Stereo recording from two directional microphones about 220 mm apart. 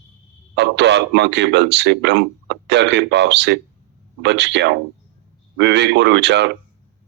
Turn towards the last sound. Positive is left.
turn(degrees=-50)  # may be behind; listen again after turning